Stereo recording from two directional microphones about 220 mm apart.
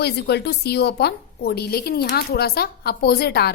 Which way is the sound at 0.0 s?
50° left (ahead or behind).